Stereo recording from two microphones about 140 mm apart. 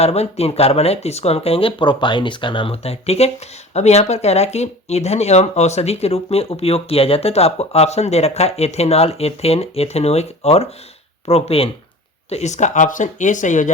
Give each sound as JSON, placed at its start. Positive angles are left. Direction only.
{"t": 0.0, "sound": "speech", "side_deg": 50}
{"t": 12.3, "sound": "speech", "side_deg": 55}